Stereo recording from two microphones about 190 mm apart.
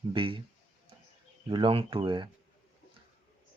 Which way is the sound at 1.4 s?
25° right (ahead or behind).